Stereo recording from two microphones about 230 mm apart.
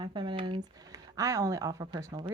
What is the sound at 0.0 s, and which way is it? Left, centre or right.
Speech, right.